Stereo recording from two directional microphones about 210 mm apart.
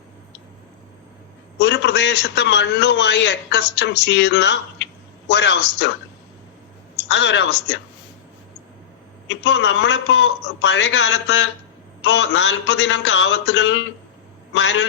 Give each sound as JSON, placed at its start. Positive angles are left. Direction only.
{"t": 1.5, "sound": "a man's voice", "side_deg": 55}
{"t": 7.1, "sound": "a man's voice", "side_deg": 60}
{"t": 9.2, "sound": "a man's voice", "side_deg": 60}